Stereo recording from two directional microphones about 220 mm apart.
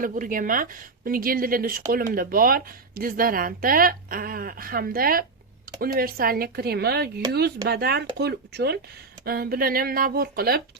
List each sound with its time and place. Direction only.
0.0 s speech: 40° right (ahead or behind)